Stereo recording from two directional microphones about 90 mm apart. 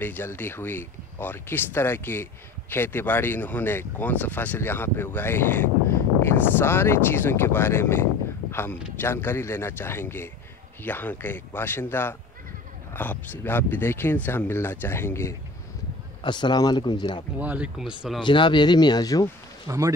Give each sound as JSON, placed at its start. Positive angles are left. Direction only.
{"t": 0.0, "sound": "speech", "side_deg": 25}
{"t": 16.2, "sound": "speech", "side_deg": 55}
{"t": 17.4, "sound": "speech", "side_deg": -20}
{"t": 17.7, "sound": "speech", "side_deg": -5}
{"t": 18.2, "sound": "speech", "side_deg": 60}
{"t": 19.7, "sound": "speech", "side_deg": -40}